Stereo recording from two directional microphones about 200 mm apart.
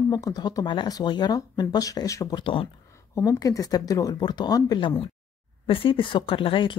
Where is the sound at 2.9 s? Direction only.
15° left (ahead or behind).